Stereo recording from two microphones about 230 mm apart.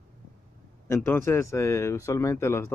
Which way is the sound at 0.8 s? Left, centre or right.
Centre.